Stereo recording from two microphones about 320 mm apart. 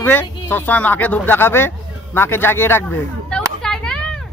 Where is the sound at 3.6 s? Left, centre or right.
Centre.